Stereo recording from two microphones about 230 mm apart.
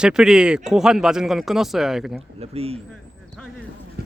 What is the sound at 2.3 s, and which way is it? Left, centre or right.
Speech, right.